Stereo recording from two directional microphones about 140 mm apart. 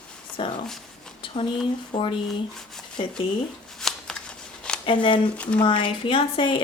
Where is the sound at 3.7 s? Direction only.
5° left (ahead or behind).